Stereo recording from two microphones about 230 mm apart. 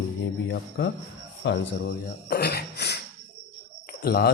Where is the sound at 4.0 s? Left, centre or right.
Left.